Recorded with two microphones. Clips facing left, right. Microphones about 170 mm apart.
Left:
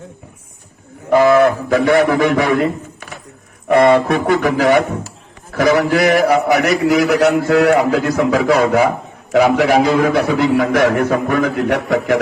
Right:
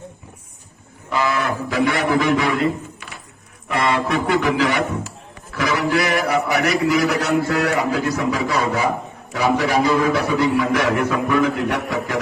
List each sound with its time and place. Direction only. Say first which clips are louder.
1.1 s a man's voice: left 11 dB; 50° left (ahead or behind)